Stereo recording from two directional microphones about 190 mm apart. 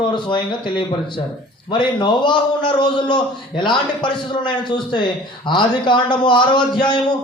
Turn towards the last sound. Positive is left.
turn(degrees=25)  # may be behind; listen again after turning